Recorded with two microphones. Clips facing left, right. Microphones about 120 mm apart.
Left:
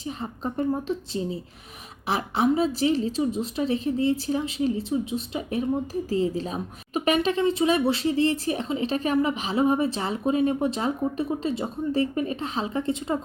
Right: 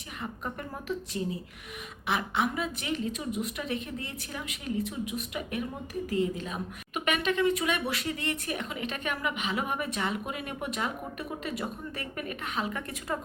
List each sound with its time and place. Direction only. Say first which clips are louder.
0.0 s a woman's voice: left 6 dB; 30° left (ahead or behind)